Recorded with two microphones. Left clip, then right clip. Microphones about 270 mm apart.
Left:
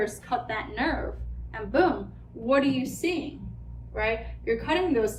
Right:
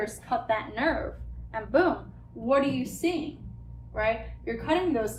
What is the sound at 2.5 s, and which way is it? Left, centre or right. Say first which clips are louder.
A woman's voice: left 1 dB; centre.